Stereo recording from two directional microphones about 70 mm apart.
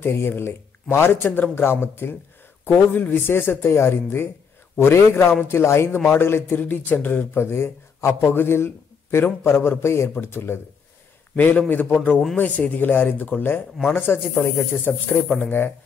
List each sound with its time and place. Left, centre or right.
0.0 s a man's voice: left
11.3 s a man's voice: left
15.0 s speech: centre